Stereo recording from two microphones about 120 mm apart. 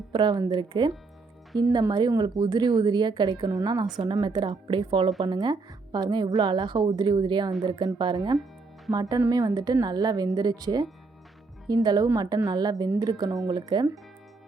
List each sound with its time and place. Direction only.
0.1 s a woman's voice: 35° right (ahead or behind)